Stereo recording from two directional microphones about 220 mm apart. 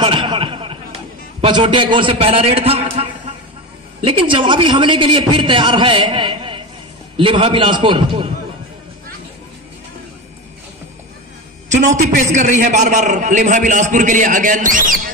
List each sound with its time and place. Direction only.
0.0 s a sound: 20° right (ahead or behind)
1.4 s a man's voice: 20° right (ahead or behind)
11.7 s a man's voice: 35° right (ahead or behind)